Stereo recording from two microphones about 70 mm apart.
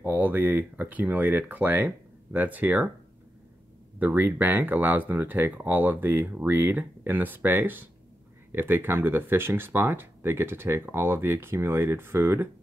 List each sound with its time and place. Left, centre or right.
0.0 s speech: right
4.0 s speech: right